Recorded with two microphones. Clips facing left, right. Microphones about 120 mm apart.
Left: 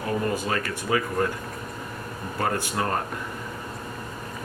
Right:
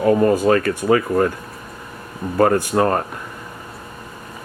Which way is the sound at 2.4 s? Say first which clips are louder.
Right 11 dB; 50° right (ahead or behind).